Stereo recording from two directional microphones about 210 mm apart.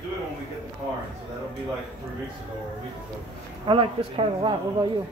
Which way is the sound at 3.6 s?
25° right (ahead or behind).